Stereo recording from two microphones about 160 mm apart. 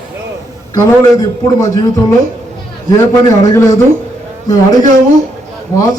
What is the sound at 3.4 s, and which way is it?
Speech, 20° left (ahead or behind).